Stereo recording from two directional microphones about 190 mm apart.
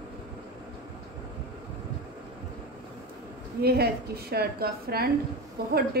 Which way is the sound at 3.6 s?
55° right (ahead or behind).